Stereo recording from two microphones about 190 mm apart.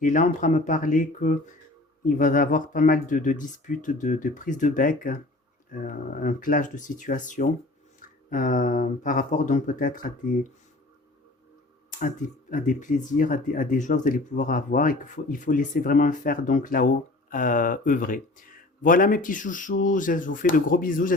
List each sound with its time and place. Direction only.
0.0 s speech: 40° left (ahead or behind)
11.9 s speech: 45° left (ahead or behind)